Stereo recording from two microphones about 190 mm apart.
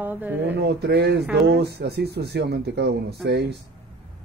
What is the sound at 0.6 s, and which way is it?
Speech, 60° right (ahead or behind).